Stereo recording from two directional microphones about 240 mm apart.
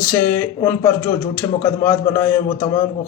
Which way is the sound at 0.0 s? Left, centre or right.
Centre.